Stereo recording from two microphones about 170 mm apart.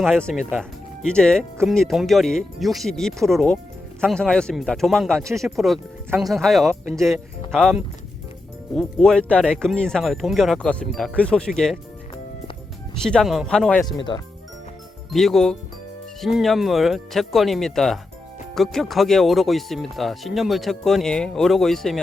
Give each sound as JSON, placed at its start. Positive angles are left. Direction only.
{"t": 0.0, "sound": "speech", "side_deg": 0}
{"t": 6.7, "sound": "speech", "side_deg": -15}
{"t": 7.5, "sound": "speech", "side_deg": 0}
{"t": 12.9, "sound": "speech", "side_deg": 5}
{"t": 13.8, "sound": "speech", "side_deg": 25}
{"t": 15.1, "sound": "speech", "side_deg": 0}